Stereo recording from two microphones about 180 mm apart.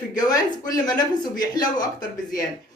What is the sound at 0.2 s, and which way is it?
A woman's voice, 20° left (ahead or behind).